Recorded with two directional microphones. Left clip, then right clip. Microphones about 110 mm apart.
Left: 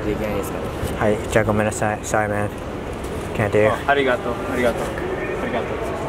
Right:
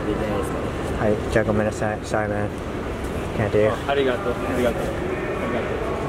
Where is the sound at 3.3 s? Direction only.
15° left (ahead or behind).